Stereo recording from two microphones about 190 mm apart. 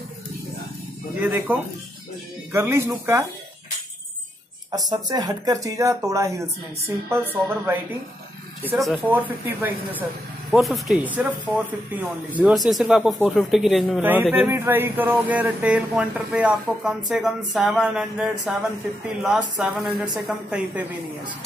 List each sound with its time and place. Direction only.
1.5 s speech: 10° right (ahead or behind)
4.6 s speech: 20° right (ahead or behind)
8.6 s speech: centre (ahead or behind)
9.1 s speech: 10° right (ahead or behind)